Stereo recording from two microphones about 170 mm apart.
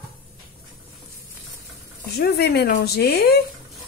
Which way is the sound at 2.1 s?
75° left (ahead or behind).